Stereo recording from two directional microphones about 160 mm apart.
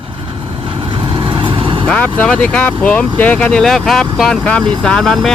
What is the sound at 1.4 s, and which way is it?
Vehicle, 30° right (ahead or behind).